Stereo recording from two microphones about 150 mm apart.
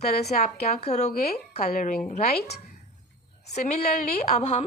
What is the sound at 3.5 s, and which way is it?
A woman's voice, 50° left (ahead or behind).